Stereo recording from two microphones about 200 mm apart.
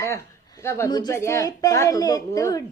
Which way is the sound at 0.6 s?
15° left (ahead or behind).